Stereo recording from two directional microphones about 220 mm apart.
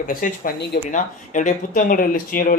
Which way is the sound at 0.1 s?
40° left (ahead or behind).